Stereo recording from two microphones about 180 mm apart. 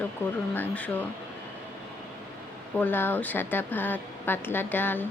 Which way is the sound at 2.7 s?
10° left (ahead or behind).